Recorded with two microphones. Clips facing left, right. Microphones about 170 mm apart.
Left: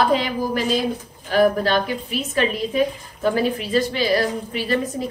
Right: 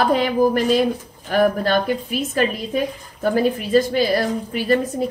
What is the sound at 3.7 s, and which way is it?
A woman's voice, 45° right (ahead or behind).